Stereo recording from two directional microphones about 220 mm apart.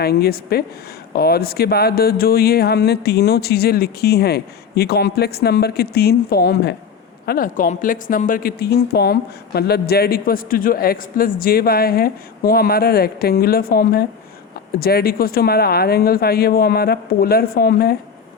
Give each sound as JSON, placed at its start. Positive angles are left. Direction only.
{"t": 0.0, "sound": "speech", "side_deg": 45}